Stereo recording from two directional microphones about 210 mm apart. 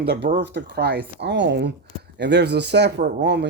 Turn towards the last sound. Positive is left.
turn(degrees=-55)  # may be behind; listen again after turning